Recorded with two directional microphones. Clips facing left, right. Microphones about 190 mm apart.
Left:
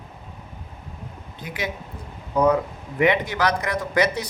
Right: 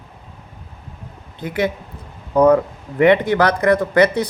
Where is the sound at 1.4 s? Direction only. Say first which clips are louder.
Right 9 dB; 55° right (ahead or behind).